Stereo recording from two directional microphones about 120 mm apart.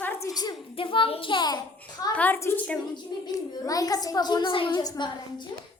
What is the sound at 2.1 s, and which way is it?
Speech, 15° left (ahead or behind).